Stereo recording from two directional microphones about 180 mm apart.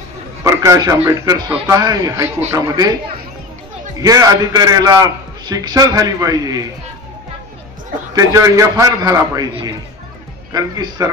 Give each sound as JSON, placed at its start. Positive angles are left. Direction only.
{"t": 0.4, "sound": "a man's voice", "side_deg": -15}
{"t": 4.0, "sound": "a man's voice", "side_deg": -20}
{"t": 8.1, "sound": "a man's voice", "side_deg": -20}